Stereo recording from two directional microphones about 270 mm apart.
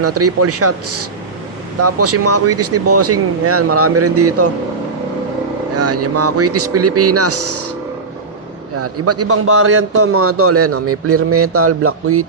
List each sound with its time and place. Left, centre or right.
0.0 s a man's voice: right
5.7 s a man's voice: right
8.8 s a man's voice: right